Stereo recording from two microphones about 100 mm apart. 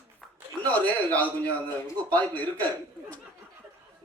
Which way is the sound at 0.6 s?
15° left (ahead or behind).